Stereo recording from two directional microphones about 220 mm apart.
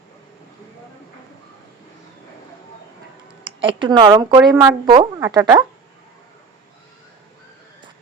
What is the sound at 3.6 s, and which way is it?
A woman's voice, 20° right (ahead or behind).